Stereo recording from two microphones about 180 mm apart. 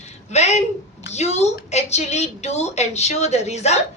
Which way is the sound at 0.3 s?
40° left (ahead or behind).